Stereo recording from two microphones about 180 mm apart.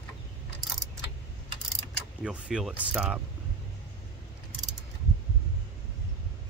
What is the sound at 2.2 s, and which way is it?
Speech, 5° right (ahead or behind).